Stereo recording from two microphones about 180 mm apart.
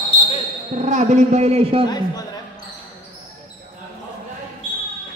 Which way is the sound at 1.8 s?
20° left (ahead or behind).